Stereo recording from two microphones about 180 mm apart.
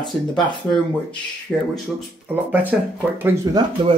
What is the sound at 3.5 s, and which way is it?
Speech, 20° right (ahead or behind).